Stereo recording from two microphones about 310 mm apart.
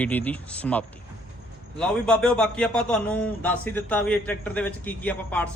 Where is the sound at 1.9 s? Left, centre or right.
Centre.